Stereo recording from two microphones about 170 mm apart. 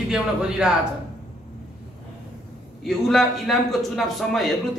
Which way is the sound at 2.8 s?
Centre (ahead or behind).